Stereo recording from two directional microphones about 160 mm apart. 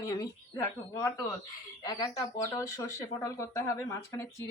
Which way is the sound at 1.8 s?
25° left (ahead or behind).